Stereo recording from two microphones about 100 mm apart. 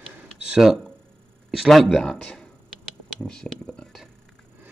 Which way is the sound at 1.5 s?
Centre (ahead or behind).